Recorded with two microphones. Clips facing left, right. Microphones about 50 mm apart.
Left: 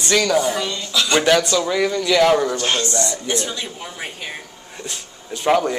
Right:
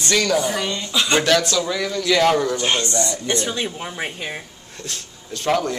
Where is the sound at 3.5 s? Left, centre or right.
Right.